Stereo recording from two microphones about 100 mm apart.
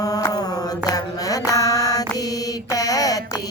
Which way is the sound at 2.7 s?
35° left (ahead or behind).